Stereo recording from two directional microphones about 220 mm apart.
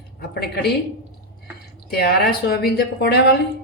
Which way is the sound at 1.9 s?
45° left (ahead or behind).